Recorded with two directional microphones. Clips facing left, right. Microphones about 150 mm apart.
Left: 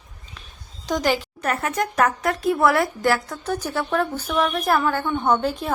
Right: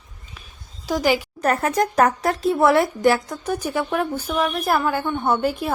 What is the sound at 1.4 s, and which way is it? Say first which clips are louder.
Speech: right 4 dB; 35° right (ahead or behind).